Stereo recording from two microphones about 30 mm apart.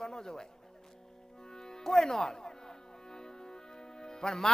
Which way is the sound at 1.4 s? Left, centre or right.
Left.